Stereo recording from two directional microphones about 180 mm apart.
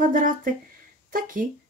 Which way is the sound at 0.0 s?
45° right (ahead or behind).